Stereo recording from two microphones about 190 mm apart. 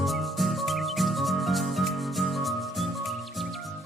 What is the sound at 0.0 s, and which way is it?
Music, centre (ahead or behind).